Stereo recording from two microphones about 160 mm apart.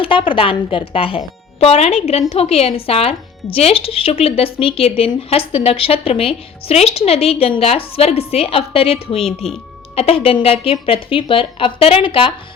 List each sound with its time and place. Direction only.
0.0 s speech: 30° left (ahead or behind)